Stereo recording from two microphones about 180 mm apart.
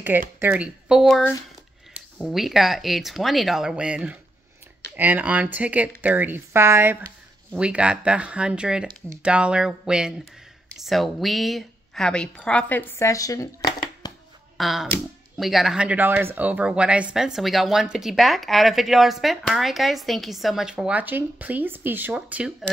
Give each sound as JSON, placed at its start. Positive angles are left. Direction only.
{"t": 0.4, "sound": "speech", "side_deg": -10}
{"t": 14.0, "sound": "a sound", "side_deg": 20}
{"t": 14.6, "sound": "speech", "side_deg": 0}